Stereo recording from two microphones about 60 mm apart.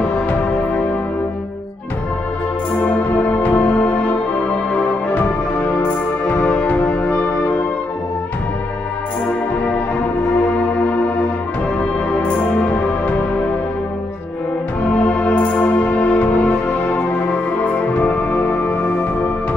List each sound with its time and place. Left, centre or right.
0.0 s music: centre
2.8 s music: left
10.6 s music: left
12.4 s music: left
14.9 s music: left